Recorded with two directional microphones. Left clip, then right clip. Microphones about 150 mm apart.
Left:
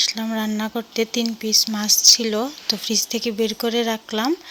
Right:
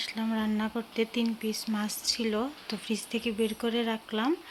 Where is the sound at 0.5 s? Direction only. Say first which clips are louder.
Left 7 dB; 35° left (ahead or behind).